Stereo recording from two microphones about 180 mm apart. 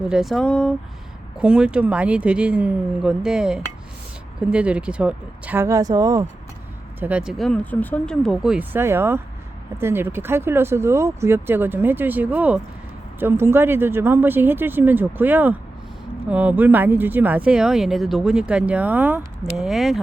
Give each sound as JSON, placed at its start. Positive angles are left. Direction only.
{"t": 0.1, "sound": "speech", "side_deg": 0}
{"t": 7.0, "sound": "speech", "side_deg": -5}